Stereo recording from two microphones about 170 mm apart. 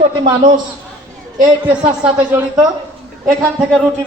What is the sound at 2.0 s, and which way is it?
Speech, 5° right (ahead or behind).